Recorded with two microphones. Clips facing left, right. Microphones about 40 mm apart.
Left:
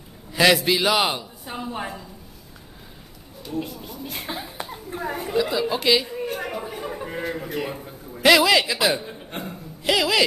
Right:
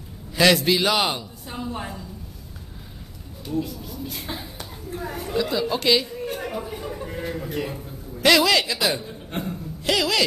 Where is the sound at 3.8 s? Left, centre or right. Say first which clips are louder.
Even; left.